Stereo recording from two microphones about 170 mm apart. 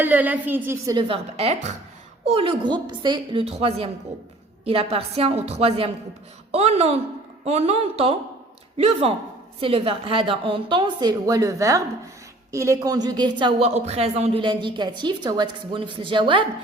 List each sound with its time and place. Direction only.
0.0 s a woman's voice: 10° right (ahead or behind)
0.9 s a woman's voice: 35° right (ahead or behind)